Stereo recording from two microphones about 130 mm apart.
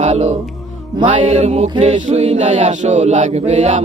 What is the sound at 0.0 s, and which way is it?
Music, 60° right (ahead or behind).